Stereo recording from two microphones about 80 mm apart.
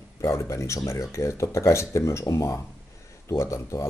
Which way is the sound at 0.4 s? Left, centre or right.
Left.